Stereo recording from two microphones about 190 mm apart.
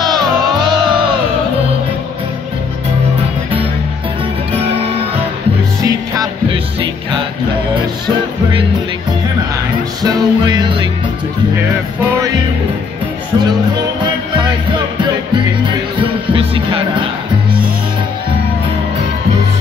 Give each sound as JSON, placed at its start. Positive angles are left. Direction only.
{"t": 0.0, "sound": "music", "side_deg": -25}
{"t": 5.9, "sound": "music", "side_deg": -25}
{"t": 10.0, "sound": "music", "side_deg": -20}
{"t": 15.6, "sound": "music", "side_deg": -25}